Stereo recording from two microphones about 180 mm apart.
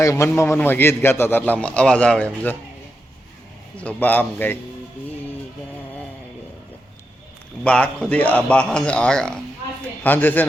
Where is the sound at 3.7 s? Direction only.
10° left (ahead or behind).